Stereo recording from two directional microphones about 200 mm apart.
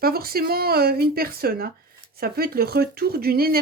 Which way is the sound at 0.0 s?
50° right (ahead or behind).